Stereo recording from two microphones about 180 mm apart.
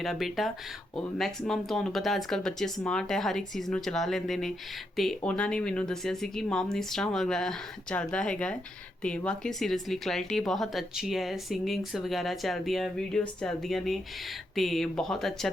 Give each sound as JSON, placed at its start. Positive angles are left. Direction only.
{"t": 0.0, "sound": "speech", "side_deg": 0}